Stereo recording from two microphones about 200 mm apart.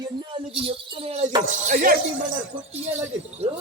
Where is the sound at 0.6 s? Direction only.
30° right (ahead or behind).